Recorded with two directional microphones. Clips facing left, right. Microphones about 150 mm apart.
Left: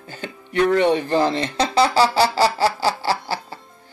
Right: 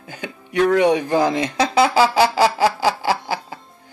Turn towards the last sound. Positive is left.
turn(degrees=-15)  # may be behind; listen again after turning